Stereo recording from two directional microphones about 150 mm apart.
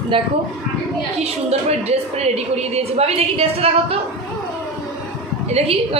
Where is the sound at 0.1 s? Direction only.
35° right (ahead or behind).